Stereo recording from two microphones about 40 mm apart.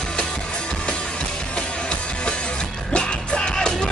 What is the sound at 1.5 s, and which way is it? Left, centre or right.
Music, left.